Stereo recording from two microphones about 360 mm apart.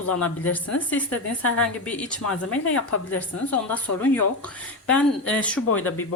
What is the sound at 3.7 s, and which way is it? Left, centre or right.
A woman's voice, centre.